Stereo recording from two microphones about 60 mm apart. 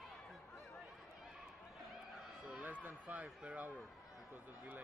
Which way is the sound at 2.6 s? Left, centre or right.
Right.